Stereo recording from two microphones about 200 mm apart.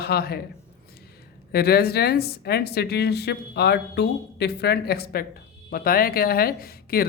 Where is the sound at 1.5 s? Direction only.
50° left (ahead or behind).